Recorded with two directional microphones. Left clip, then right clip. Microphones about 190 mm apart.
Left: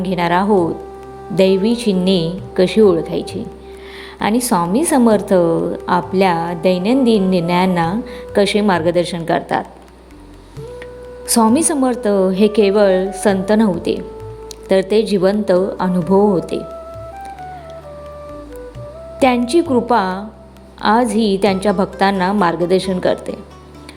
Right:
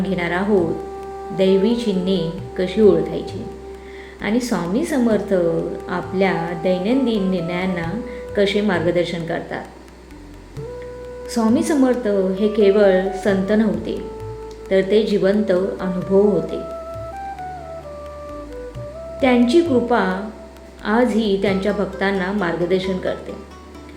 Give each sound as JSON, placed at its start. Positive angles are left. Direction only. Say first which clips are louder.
{"t": 0.0, "sound": "speech", "louder": "left 6 dB", "side_deg": 50}
{"t": 11.3, "sound": "speech", "louder": "left 5 dB", "side_deg": 45}
{"t": 19.5, "sound": "speech", "louder": "left 2 dB", "side_deg": 45}